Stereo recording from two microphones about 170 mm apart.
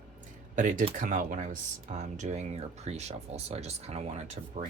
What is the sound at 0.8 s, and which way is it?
Speech, 50° right (ahead or behind).